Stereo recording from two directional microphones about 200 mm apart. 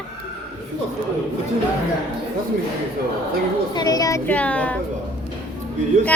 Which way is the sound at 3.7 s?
20° left (ahead or behind).